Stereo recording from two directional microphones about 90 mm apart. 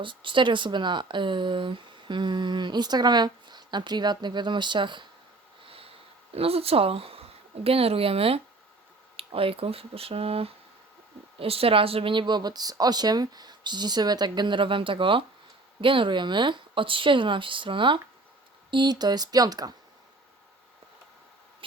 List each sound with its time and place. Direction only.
0.0 s speech: 65° right (ahead or behind)
5.6 s sniff: 90° right
6.3 s speech: 90° right; by 18.0 s 65° right (ahead or behind)
18.7 s speech: 55° right (ahead or behind)